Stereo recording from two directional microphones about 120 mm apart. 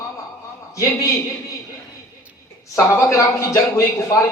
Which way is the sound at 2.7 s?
25° left (ahead or behind).